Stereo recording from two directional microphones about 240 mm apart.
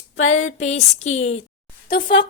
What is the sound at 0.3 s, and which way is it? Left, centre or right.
A woman's voice, left.